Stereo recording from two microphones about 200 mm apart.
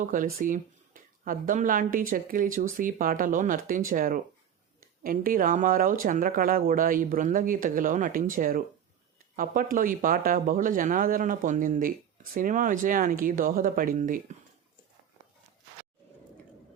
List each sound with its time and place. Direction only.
0.0 s speech: 45° right (ahead or behind)